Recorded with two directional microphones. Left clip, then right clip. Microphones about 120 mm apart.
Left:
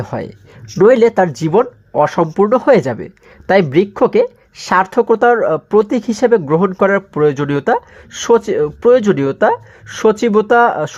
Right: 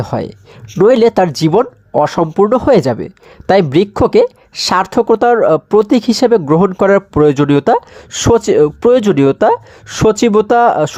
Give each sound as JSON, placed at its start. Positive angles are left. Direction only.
{"t": 0.0, "sound": "speech", "side_deg": -25}